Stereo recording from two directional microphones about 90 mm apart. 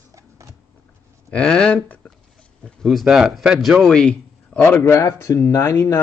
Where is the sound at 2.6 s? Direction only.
Centre (ahead or behind).